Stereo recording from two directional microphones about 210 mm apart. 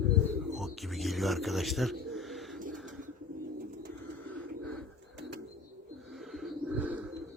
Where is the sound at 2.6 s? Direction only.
40° right (ahead or behind).